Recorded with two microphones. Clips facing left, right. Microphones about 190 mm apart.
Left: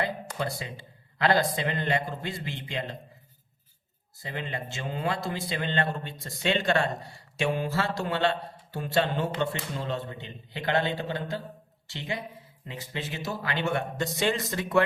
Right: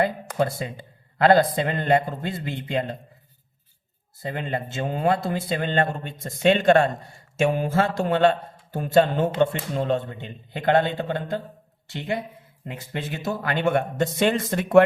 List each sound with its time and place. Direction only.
0.0 s speech: 50° right (ahead or behind)
4.2 s a man's voice: 50° right (ahead or behind)